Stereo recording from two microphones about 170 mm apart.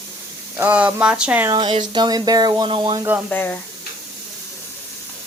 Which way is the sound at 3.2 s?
10° left (ahead or behind).